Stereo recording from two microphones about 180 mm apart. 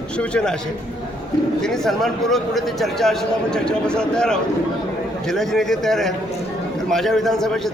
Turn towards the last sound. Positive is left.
turn(degrees=0)  # may be behind; listen again after turning